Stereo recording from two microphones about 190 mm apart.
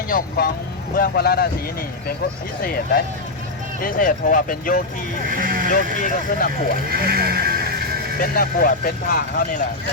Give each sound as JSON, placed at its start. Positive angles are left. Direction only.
{"t": 0.1, "sound": "speech", "side_deg": 50}
{"t": 2.6, "sound": "speech", "side_deg": 50}
{"t": 5.3, "sound": "speech", "side_deg": -45}
{"t": 5.7, "sound": "speech", "side_deg": 50}
{"t": 6.8, "sound": "music", "side_deg": -50}
{"t": 8.2, "sound": "speech", "side_deg": 50}